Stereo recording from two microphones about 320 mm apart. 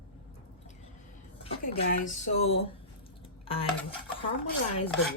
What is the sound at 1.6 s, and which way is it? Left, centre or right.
Speech, left.